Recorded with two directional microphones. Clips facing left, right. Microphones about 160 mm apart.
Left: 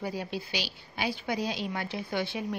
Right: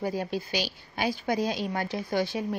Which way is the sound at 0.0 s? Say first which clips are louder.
Right 4 dB; 45° right (ahead or behind).